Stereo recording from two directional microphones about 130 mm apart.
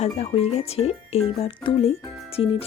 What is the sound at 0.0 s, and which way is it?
Speech, 55° left (ahead or behind).